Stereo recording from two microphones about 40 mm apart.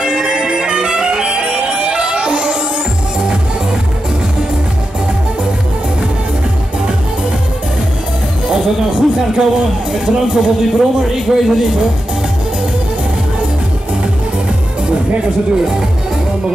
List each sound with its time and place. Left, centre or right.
0.2 s music: centre
8.5 s a man's voice: right
15.5 s speech: centre